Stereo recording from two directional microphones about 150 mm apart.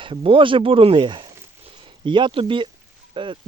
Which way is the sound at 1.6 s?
35° right (ahead or behind).